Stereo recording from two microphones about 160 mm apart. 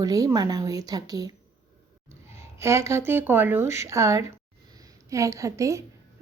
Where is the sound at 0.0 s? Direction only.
20° right (ahead or behind).